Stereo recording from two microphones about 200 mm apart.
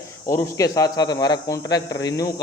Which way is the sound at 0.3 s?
15° left (ahead or behind).